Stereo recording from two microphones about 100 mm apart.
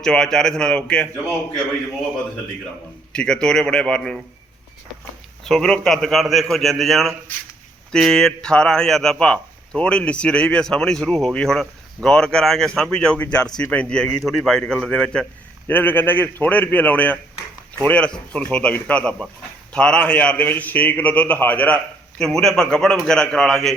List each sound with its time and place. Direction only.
0.0 s speech: 5° left (ahead or behind)
3.1 s speech: 10° left (ahead or behind)
5.5 s a man's voice: 5° left (ahead or behind)
15.6 s speech: 20° left (ahead or behind)
22.2 s a man's voice: 5° left (ahead or behind)